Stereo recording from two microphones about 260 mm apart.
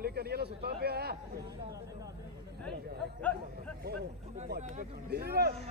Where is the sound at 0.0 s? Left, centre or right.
Right.